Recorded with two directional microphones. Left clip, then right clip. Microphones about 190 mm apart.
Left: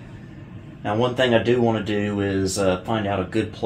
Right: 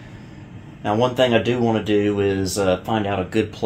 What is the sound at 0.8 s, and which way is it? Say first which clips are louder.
Speech: right 3 dB; 65° right (ahead or behind).